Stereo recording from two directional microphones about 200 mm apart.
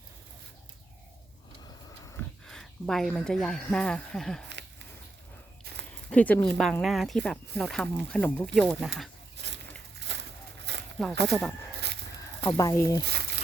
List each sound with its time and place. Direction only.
2.5 s speech: centre (ahead or behind)
5.7 s a sound: 50° right (ahead or behind)
6.1 s speech: 5° left (ahead or behind)
10.0 s a sound: 60° right (ahead or behind)
11.1 s speech: 60° right (ahead or behind)
12.4 s speech: 20° left (ahead or behind)
13.1 s crumpling: 55° right (ahead or behind)